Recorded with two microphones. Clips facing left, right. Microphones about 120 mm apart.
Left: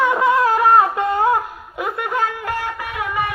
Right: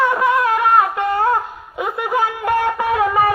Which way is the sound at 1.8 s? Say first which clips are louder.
Right 3 dB; 5° right (ahead or behind).